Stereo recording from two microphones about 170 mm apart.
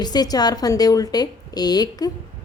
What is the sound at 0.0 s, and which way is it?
A woman's voice, 25° left (ahead or behind).